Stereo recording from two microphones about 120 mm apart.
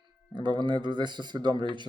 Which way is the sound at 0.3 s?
40° right (ahead or behind).